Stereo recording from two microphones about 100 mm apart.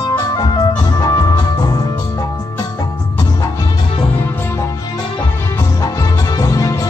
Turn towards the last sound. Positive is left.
turn(degrees=35)  # may be behind; listen again after turning